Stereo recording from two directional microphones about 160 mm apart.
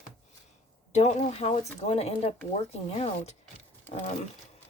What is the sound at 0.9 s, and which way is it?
Speech, 45° left (ahead or behind).